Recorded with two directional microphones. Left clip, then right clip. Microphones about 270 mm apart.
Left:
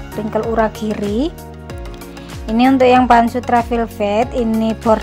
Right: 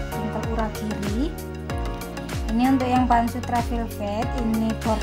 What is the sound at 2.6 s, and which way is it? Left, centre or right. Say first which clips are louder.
A woman's voice: left 11 dB; left.